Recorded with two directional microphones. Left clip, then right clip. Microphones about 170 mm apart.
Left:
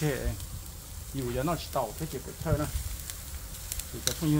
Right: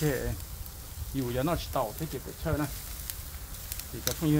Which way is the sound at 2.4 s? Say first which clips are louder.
Left 1 dB; 40° right (ahead or behind).